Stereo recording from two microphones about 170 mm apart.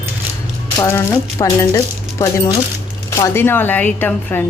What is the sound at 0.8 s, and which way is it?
Speech, 15° left (ahead or behind).